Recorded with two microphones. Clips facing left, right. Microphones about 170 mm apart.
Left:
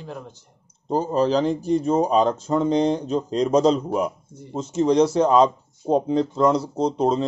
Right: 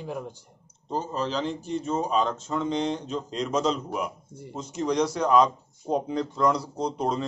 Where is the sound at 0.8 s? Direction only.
40° left (ahead or behind).